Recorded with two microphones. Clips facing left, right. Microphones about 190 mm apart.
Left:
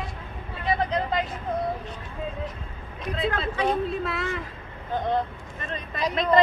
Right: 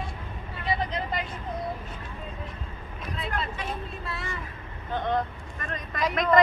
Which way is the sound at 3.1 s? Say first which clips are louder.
Left 6 dB; 90° left.